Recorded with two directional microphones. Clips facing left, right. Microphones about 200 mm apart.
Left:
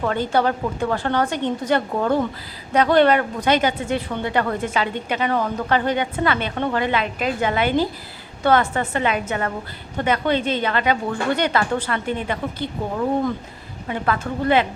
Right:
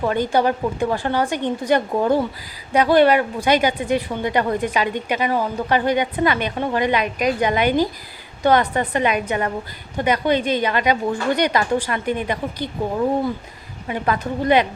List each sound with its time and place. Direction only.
0.0 s a woman's voice: 15° right (ahead or behind)
13.8 s a woman's voice: 15° right (ahead or behind)